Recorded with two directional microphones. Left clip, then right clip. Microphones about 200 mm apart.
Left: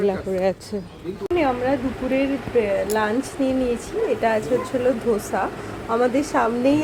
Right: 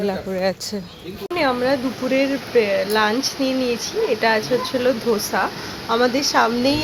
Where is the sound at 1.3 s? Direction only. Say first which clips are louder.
Right 2 dB; 5° right (ahead or behind).